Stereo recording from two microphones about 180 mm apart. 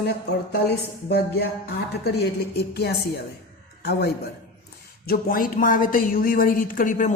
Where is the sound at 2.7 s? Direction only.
60° left (ahead or behind); by 7.1 s 45° left (ahead or behind).